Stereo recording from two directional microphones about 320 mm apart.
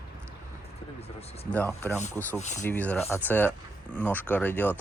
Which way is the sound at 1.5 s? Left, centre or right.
Centre.